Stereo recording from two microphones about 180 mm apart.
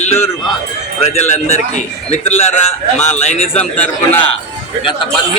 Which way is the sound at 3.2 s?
35° left (ahead or behind).